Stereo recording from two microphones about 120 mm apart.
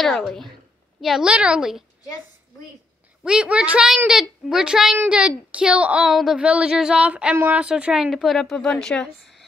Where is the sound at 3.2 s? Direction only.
5° right (ahead or behind).